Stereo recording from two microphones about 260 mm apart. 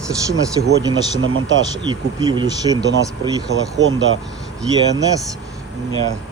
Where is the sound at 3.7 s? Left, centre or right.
Right.